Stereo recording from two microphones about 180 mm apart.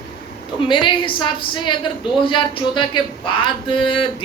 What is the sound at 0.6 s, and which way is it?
Speech, 25° left (ahead or behind).